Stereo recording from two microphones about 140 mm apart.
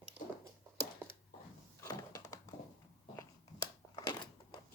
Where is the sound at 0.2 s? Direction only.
10° right (ahead or behind).